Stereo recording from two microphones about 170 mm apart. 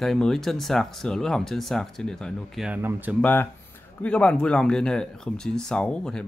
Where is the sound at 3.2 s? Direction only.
10° left (ahead or behind).